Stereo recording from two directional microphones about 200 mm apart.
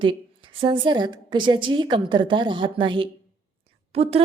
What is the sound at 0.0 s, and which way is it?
A woman's voice, 25° right (ahead or behind).